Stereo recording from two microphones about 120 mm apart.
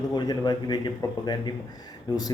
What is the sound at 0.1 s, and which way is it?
Speech, 35° left (ahead or behind).